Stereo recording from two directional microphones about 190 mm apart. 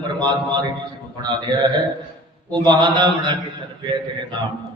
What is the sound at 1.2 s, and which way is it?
A man's voice, 20° right (ahead or behind).